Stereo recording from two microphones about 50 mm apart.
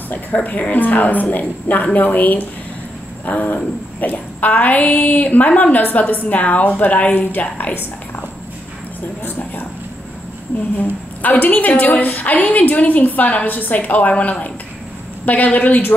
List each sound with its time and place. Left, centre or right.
0.1 s a woman's voice: left
9.2 s a woman's voice: left
10.8 s a woman's voice: left